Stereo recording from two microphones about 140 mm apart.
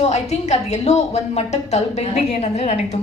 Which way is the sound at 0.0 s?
50° left (ahead or behind).